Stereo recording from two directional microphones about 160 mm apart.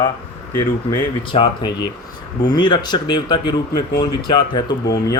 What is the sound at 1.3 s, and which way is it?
Speech, 30° left (ahead or behind).